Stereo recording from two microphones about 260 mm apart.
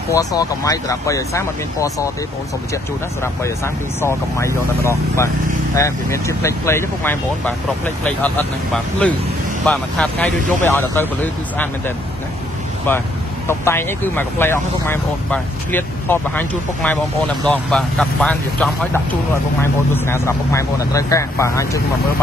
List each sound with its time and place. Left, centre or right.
0.1 s speech: centre
13.5 s speech: centre